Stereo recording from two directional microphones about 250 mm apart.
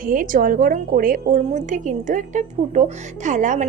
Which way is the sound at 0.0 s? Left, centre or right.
Right.